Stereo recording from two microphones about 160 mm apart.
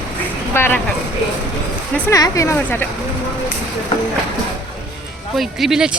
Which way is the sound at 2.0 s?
20° left (ahead or behind).